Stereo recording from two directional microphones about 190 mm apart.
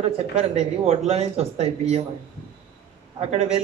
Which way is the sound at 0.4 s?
35° right (ahead or behind).